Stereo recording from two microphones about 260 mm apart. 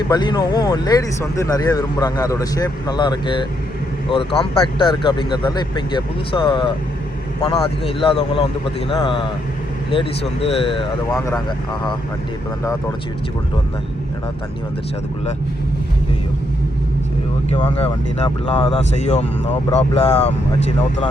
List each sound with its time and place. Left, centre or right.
0.1 s speech: centre
17.5 s speech: left